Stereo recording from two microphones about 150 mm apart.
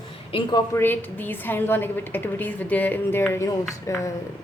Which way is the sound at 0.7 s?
15° left (ahead or behind).